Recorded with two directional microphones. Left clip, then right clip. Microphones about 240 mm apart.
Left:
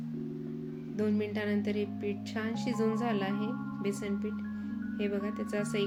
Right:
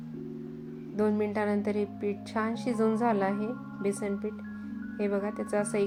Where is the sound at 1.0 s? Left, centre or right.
Centre.